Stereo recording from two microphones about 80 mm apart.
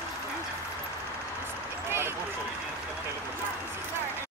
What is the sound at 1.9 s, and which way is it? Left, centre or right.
Run, right.